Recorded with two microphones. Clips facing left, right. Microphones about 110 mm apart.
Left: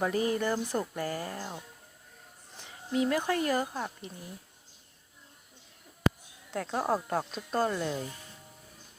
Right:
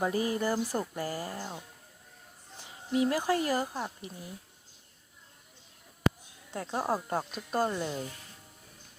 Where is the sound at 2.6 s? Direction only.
50° left (ahead or behind).